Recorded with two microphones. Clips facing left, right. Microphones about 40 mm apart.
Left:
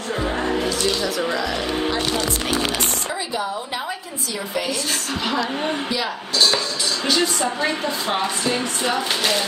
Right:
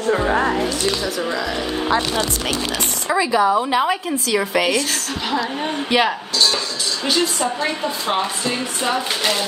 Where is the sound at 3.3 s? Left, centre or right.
Right.